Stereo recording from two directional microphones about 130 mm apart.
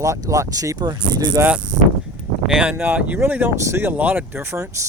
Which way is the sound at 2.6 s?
10° right (ahead or behind).